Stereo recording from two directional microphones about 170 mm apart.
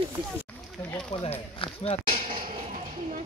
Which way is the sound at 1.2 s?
35° left (ahead or behind).